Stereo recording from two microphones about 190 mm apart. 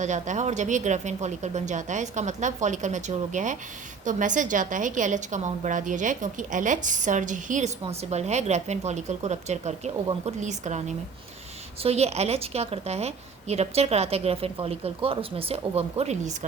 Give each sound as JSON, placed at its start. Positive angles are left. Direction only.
{"t": 0.0, "sound": "a woman's voice", "side_deg": -40}